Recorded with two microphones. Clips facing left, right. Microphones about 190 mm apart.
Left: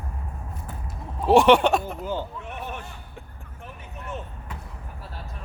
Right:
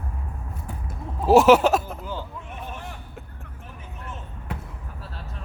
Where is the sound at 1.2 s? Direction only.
5° right (ahead or behind).